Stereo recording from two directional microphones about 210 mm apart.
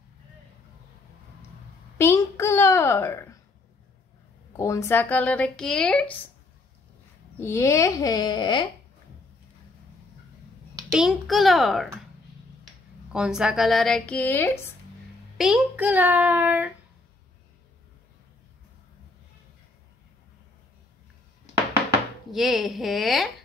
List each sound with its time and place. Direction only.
2.0 s a sound: 10° left (ahead or behind)
4.6 s speech: 15° left (ahead or behind)
7.3 s speech: 10° left (ahead or behind)
10.9 s speech: centre (ahead or behind)
13.1 s speech: 5° right (ahead or behind)
15.3 s a child's voice: centre (ahead or behind)
22.3 s speech: centre (ahead or behind)